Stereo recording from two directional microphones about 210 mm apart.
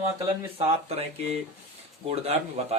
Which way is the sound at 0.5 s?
30° right (ahead or behind).